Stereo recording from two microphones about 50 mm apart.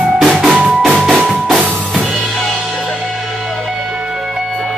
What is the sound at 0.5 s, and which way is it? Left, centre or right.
Drum, right.